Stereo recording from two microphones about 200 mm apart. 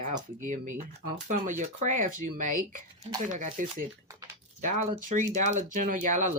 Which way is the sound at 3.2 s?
40° right (ahead or behind).